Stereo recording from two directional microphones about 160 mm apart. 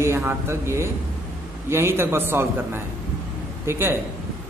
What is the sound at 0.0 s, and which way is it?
A man's voice, 15° right (ahead or behind).